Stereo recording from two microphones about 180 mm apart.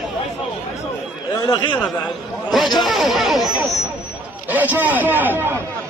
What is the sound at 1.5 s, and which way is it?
Speech, 25° left (ahead or behind).